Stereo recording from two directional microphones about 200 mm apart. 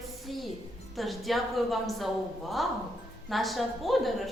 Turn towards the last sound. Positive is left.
turn(degrees=0)  # may be behind; listen again after turning